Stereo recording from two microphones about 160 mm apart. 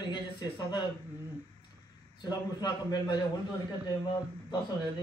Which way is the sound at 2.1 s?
25° left (ahead or behind).